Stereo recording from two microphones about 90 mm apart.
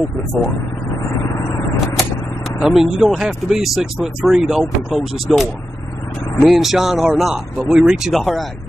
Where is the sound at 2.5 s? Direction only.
5° right (ahead or behind).